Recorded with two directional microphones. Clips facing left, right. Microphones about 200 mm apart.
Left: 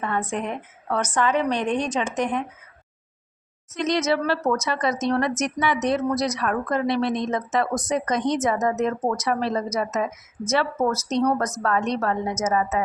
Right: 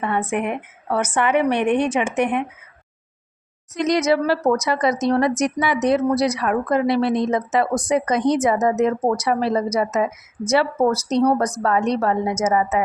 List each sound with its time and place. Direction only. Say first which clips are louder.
0.0 s speech: right 4 dB; 10° right (ahead or behind)
1.6 s a woman's voice: right 6 dB; 60° right (ahead or behind)
1.9 s speech: right 4 dB; 10° right (ahead or behind)
3.8 s speech: right 4 dB; 15° right (ahead or behind)
9.0 s speech: right 4 dB; 30° right (ahead or behind)
9.2 s speech: right 4 dB; 10° right (ahead or behind)
11.2 s speech: right 4 dB; 30° right (ahead or behind)
11.7 s speech: right 4 dB; 15° right (ahead or behind)